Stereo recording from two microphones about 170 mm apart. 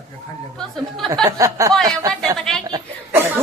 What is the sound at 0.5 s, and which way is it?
Speech, centre (ahead or behind).